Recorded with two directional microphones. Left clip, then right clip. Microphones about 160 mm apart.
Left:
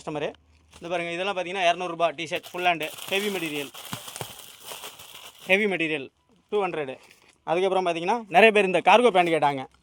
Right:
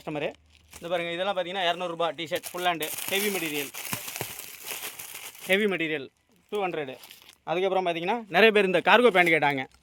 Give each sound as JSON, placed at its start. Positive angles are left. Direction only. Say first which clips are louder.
{"t": 0.0, "sound": "a man's voice", "louder": "left 1 dB", "side_deg": 5}
{"t": 0.8, "sound": "a man's voice", "louder": "even", "side_deg": 15}
{"t": 3.8, "sound": "a sound", "louder": "right 2 dB", "side_deg": -35}
{"t": 4.7, "sound": "crumpling", "louder": "right 2 dB", "side_deg": 0}
{"t": 6.5, "sound": "a man's voice", "louder": "left 3 dB", "side_deg": 15}
{"t": 8.3, "sound": "speech", "louder": "left 3 dB", "side_deg": -15}
{"t": 8.5, "sound": "a man's voice", "louder": "left 2 dB", "side_deg": -25}